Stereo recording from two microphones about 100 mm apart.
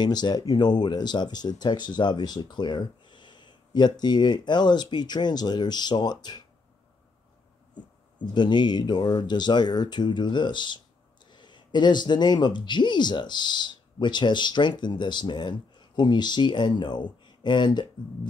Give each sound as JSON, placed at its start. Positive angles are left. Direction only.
{"t": 0.0, "sound": "speech", "side_deg": 45}
{"t": 7.7, "sound": "speech", "side_deg": 50}